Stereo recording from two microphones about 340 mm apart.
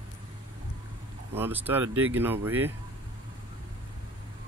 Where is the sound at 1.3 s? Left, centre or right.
Centre.